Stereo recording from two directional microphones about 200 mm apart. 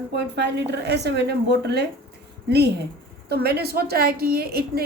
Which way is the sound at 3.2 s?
55° right (ahead or behind).